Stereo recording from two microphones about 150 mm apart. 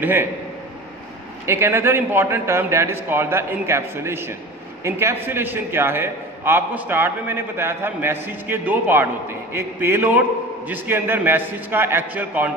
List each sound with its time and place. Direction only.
0.0 s a man's voice: 15° right (ahead or behind)
1.4 s a man's voice: 15° right (ahead or behind)